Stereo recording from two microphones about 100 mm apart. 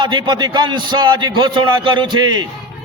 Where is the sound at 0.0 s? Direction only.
50° right (ahead or behind).